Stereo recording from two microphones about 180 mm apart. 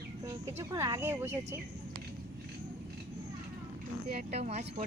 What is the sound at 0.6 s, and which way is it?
Speech, 20° right (ahead or behind).